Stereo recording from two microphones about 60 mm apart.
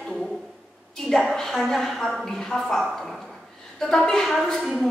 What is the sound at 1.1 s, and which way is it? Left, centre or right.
A woman's voice, centre.